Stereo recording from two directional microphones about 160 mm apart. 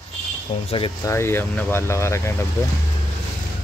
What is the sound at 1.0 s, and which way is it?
Speech, 15° left (ahead or behind).